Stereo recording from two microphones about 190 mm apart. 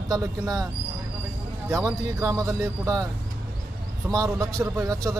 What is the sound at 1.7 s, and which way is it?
Speech, 15° right (ahead or behind).